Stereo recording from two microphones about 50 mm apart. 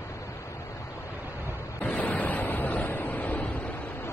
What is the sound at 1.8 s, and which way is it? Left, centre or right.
Waves, left.